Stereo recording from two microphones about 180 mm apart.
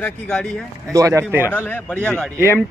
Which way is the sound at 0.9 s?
15° right (ahead or behind).